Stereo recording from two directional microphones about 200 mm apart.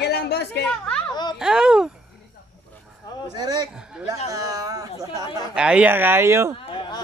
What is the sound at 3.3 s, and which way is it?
Speech, 20° right (ahead or behind).